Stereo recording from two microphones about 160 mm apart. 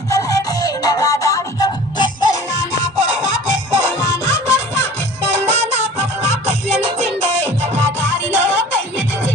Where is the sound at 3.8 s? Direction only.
20° left (ahead or behind).